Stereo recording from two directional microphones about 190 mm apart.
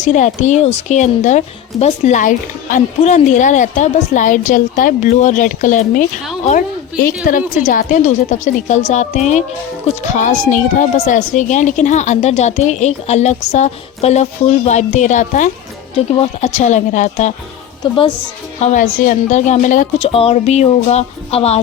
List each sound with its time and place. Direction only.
0.0 s speech: 40° left (ahead or behind)
7.3 s speech: 45° left (ahead or behind)
18.6 s speech: 40° left (ahead or behind)
20.1 s speech: 30° left (ahead or behind)